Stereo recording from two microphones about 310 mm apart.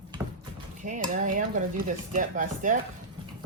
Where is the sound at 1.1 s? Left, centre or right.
Right.